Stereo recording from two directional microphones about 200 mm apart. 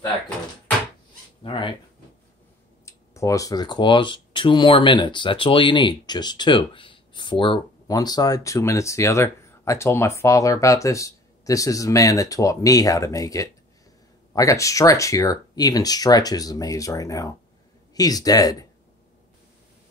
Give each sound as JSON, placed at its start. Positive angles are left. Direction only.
{"t": 1.4, "sound": "speech", "side_deg": 25}
{"t": 2.8, "sound": "speech", "side_deg": 15}